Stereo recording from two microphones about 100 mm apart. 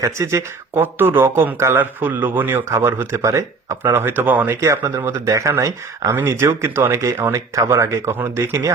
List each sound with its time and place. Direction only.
0.0 s speech: 30° right (ahead or behind)
3.9 s speech: 20° right (ahead or behind)
4.6 s speech: 30° right (ahead or behind)